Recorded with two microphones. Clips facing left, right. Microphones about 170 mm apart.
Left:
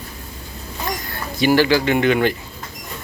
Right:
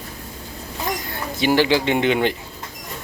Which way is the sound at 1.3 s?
20° right (ahead or behind).